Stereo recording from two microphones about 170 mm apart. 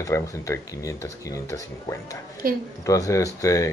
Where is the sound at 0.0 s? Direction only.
20° left (ahead or behind).